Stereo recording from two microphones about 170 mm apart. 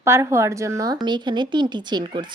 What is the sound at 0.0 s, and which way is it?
Speech, 15° right (ahead or behind).